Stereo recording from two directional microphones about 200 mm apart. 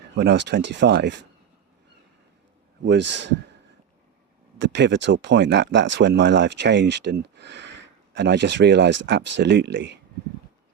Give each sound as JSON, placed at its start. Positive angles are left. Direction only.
{"t": 0.2, "sound": "speech", "side_deg": -60}
{"t": 2.8, "sound": "speech", "side_deg": -60}
{"t": 4.6, "sound": "speech", "side_deg": -60}